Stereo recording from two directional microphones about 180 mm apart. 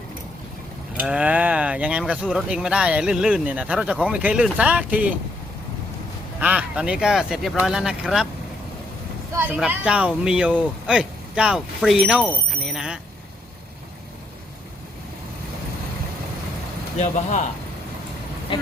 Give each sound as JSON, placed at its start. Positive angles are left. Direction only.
{"t": 0.9, "sound": "speech", "side_deg": -5}
{"t": 6.4, "sound": "speech", "side_deg": -10}
{"t": 9.3, "sound": "speech", "side_deg": -10}
{"t": 17.0, "sound": "speech", "side_deg": 40}
{"t": 18.5, "sound": "speech", "side_deg": 30}